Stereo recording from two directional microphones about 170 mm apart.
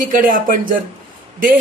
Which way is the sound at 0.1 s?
55° right (ahead or behind).